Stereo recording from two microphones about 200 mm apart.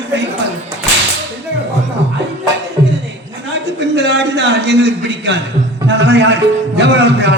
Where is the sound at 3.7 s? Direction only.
60° right (ahead or behind).